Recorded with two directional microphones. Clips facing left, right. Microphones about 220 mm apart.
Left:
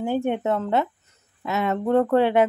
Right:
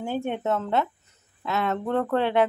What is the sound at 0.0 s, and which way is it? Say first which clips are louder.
Speech: left 4 dB; 15° left (ahead or behind).